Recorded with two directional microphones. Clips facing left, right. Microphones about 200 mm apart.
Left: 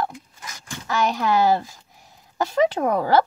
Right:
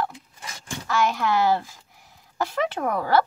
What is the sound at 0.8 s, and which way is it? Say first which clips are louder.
Speech: left 1 dB; 15° left (ahead or behind).